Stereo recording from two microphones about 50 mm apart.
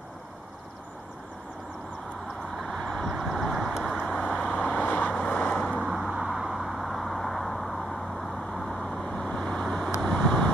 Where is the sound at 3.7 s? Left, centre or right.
Centre.